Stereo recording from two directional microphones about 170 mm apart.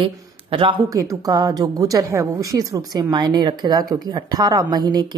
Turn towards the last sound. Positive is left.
turn(degrees=-25)  # may be behind; listen again after turning